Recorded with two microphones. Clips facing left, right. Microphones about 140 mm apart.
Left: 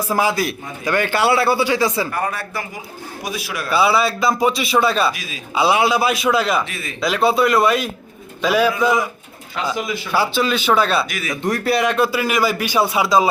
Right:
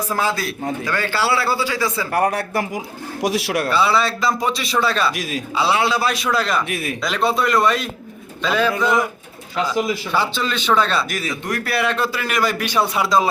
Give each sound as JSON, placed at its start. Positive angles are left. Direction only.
{"t": 0.1, "sound": "speech", "side_deg": 15}
{"t": 2.0, "sound": "a man's voice", "side_deg": -70}
{"t": 3.7, "sound": "speech", "side_deg": 10}
{"t": 6.7, "sound": "speech", "side_deg": -65}
{"t": 7.0, "sound": "a man's voice", "side_deg": 5}
{"t": 9.7, "sound": "speech", "side_deg": -35}
{"t": 10.1, "sound": "speech", "side_deg": 5}
{"t": 11.4, "sound": "a man's voice", "side_deg": 25}